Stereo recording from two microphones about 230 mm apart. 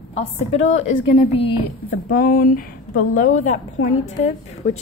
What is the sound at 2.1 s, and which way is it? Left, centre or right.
A woman's voice, left.